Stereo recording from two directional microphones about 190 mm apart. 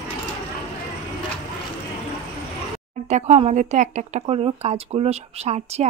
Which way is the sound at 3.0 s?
35° right (ahead or behind).